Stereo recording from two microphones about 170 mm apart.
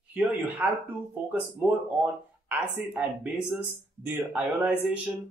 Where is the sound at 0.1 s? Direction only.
10° right (ahead or behind).